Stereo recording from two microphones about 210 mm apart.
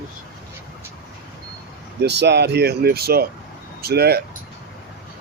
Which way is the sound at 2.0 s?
55° right (ahead or behind).